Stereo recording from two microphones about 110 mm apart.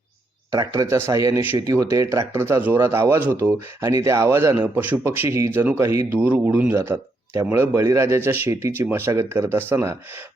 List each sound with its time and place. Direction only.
0.5 s speech: 35° right (ahead or behind)
6.1 s speech: 15° right (ahead or behind)